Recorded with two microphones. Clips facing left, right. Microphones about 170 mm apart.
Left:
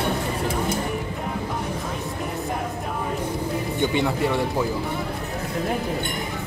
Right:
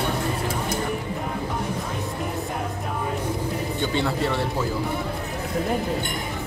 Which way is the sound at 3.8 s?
15° left (ahead or behind).